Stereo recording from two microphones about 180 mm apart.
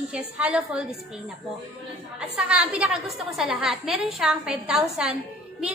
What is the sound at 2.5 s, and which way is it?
A woman's voice, 5° right (ahead or behind).